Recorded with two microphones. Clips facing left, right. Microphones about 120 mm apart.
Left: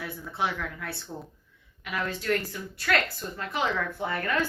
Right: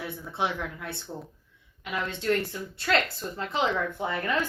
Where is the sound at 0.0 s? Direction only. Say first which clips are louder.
Even; 25° right (ahead or behind).